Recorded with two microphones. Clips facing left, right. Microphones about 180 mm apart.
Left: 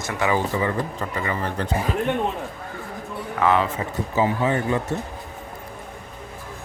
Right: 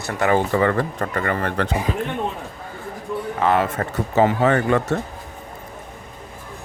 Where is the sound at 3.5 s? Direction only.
60° right (ahead or behind).